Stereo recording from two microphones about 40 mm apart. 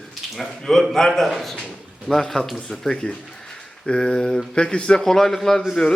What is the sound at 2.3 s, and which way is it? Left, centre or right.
Speech, centre.